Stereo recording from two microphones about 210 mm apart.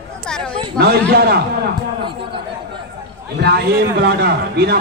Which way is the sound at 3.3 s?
50° right (ahead or behind).